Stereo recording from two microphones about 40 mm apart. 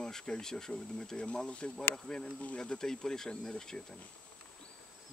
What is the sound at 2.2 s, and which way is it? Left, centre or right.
Speech, left.